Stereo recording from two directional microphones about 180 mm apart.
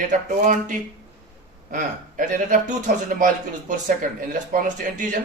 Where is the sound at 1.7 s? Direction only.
45° right (ahead or behind).